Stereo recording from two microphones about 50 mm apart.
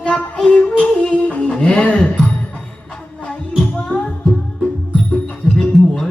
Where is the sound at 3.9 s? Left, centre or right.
Left.